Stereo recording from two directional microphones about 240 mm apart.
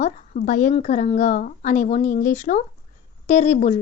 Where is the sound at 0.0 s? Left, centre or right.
Left.